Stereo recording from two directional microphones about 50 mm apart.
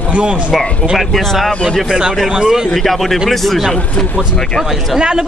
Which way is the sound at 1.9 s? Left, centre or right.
Centre.